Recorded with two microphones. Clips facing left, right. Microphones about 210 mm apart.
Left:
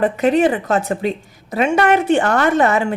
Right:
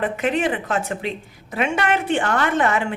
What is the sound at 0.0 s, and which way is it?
A woman's voice, 40° left (ahead or behind).